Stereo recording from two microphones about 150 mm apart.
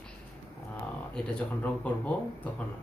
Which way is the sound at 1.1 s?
10° left (ahead or behind).